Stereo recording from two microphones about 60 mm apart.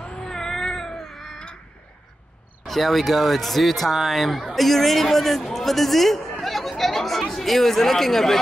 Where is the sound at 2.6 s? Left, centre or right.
Centre.